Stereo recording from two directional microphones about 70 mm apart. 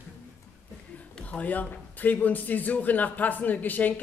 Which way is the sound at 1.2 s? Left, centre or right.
Left.